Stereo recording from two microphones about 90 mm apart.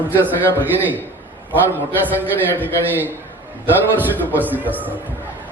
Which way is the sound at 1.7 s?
20° right (ahead or behind).